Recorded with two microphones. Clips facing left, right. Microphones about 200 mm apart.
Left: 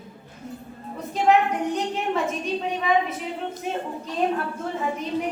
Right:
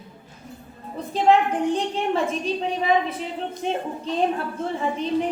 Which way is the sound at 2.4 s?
30° right (ahead or behind).